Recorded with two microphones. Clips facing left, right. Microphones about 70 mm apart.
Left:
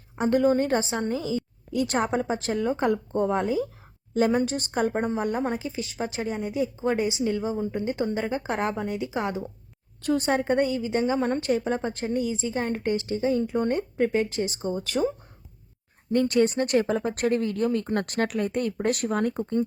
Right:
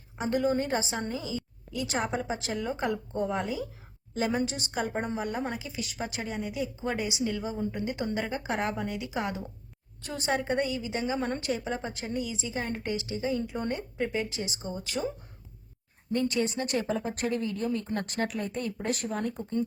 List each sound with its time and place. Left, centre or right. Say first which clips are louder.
0.2 s a woman's voice: left 6 dB; left
1.7 s a woman's voice: left 6 dB; left
10.1 s a woman's voice: left 6 dB; left
16.1 s speech: left 7 dB; left